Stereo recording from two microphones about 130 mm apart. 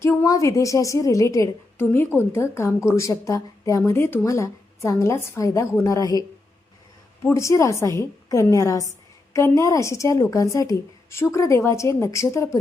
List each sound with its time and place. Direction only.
0.0 s a woman's voice: 20° left (ahead or behind)
7.3 s a woman's voice: 25° left (ahead or behind)